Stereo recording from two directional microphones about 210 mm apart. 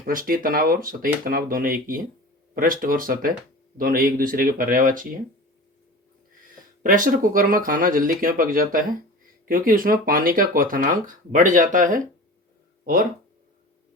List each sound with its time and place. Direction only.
0.0 s speech: 40° right (ahead or behind)
6.8 s speech: 40° right (ahead or behind)